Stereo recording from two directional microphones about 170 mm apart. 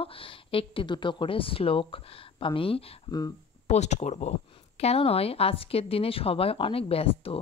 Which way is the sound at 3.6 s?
40° left (ahead or behind).